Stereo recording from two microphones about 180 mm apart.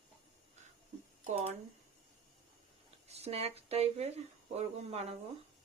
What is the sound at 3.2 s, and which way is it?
Speech, 35° right (ahead or behind).